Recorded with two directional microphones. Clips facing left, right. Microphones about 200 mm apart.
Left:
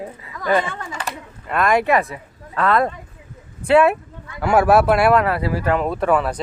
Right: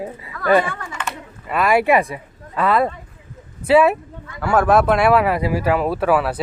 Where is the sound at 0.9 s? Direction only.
35° left (ahead or behind).